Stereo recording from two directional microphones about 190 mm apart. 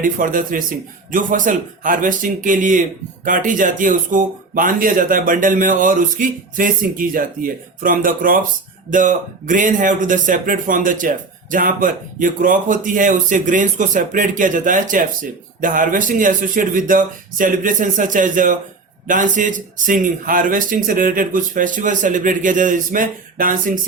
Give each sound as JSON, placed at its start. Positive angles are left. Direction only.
{"t": 0.0, "sound": "speech", "side_deg": -45}